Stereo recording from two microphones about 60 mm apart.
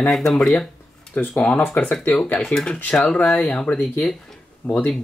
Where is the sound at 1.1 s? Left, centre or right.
Left.